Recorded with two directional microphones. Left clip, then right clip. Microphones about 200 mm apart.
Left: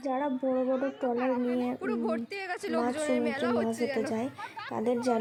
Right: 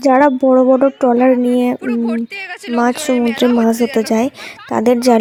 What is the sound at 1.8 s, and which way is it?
Speech, 5° left (ahead or behind).